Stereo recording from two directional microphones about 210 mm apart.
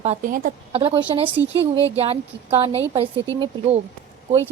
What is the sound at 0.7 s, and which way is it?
A woman's voice, 25° right (ahead or behind).